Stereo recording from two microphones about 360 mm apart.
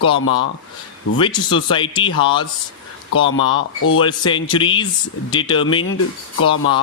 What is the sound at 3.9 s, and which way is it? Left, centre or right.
Speech, centre.